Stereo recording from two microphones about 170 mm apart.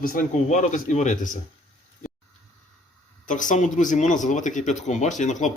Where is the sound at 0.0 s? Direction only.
55° left (ahead or behind).